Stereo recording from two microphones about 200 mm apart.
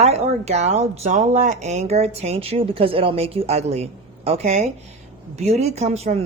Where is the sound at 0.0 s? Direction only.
30° right (ahead or behind).